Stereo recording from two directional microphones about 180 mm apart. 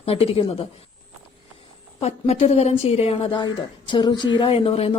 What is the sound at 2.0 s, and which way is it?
Speech, 35° left (ahead or behind).